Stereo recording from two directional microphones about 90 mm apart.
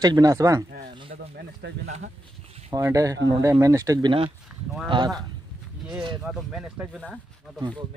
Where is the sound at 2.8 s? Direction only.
35° right (ahead or behind).